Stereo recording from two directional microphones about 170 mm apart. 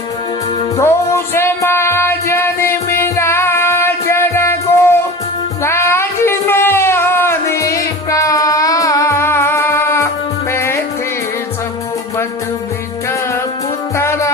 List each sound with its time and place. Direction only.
0.8 s music: 15° left (ahead or behind)
5.6 s a sound: 15° left (ahead or behind)
10.5 s music: 15° left (ahead or behind)
13.9 s music: 15° left (ahead or behind)